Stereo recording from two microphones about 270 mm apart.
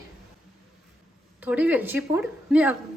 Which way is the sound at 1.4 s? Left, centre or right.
Centre.